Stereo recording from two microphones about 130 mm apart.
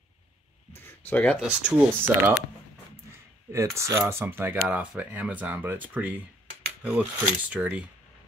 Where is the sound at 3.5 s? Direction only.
20° right (ahead or behind).